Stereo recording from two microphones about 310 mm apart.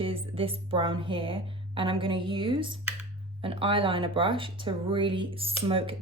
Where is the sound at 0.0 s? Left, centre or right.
Centre.